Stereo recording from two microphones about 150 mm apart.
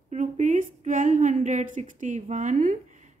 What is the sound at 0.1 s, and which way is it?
A woman's voice, 55° right (ahead or behind).